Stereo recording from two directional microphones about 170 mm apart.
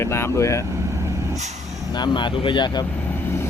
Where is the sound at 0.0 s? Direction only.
15° left (ahead or behind).